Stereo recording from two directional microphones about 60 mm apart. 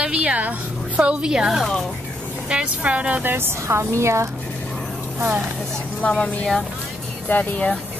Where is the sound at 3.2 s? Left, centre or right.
Right.